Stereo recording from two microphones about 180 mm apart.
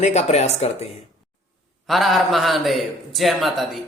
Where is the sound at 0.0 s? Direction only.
40° left (ahead or behind).